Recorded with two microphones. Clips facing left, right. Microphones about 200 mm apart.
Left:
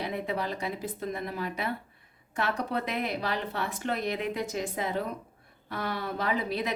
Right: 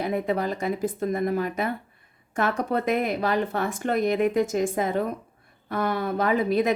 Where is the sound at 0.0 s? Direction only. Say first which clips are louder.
Right 7 dB; 45° right (ahead or behind).